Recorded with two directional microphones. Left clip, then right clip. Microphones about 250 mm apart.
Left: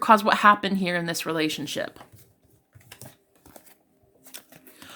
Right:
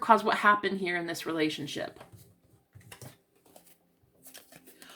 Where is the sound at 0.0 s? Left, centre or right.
Left.